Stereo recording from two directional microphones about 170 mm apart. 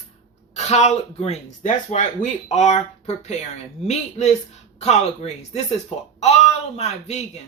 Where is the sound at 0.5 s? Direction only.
40° left (ahead or behind).